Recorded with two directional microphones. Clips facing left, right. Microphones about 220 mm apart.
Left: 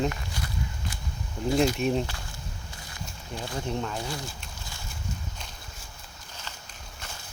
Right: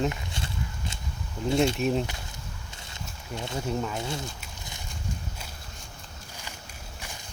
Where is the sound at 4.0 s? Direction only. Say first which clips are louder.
Right 1 dB; 25° right (ahead or behind).